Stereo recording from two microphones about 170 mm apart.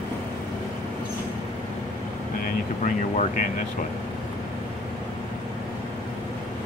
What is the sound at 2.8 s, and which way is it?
Speech, 45° left (ahead or behind).